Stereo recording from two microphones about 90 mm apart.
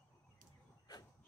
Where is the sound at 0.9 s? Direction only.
45° left (ahead or behind).